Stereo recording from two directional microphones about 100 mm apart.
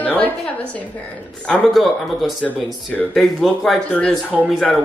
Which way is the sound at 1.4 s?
15° left (ahead or behind).